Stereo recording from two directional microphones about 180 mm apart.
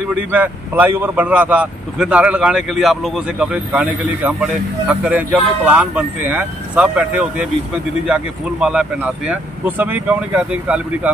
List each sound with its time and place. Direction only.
0.1 s speech: 10° right (ahead or behind)